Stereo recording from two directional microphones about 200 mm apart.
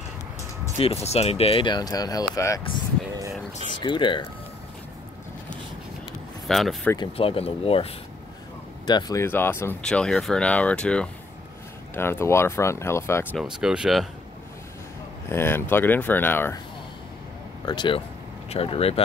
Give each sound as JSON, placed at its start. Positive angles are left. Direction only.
{"t": 1.0, "sound": "speech", "side_deg": 30}
{"t": 3.8, "sound": "speech", "side_deg": 25}
{"t": 6.4, "sound": "speech", "side_deg": 0}
{"t": 7.2, "sound": "speech", "side_deg": 30}
{"t": 13.4, "sound": "speech", "side_deg": -5}
{"t": 15.2, "sound": "speech", "side_deg": 10}
{"t": 17.6, "sound": "speech", "side_deg": 25}